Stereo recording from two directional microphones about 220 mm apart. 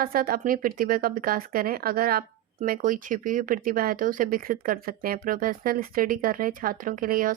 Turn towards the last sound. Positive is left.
turn(degrees=-40)  # may be behind; listen again after turning